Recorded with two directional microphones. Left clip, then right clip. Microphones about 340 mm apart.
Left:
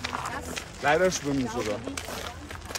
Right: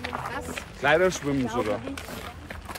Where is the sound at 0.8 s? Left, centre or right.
Right.